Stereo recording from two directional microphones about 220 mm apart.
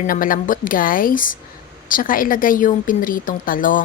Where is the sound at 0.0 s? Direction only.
40° left (ahead or behind).